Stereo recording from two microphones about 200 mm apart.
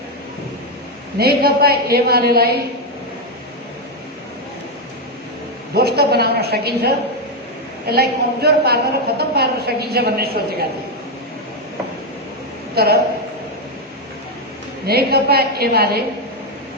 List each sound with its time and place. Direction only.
1.2 s a woman's voice: 50° right (ahead or behind)
5.7 s a woman's voice: 50° right (ahead or behind)
12.7 s a woman's voice: 50° right (ahead or behind)
14.8 s a woman's voice: 50° right (ahead or behind)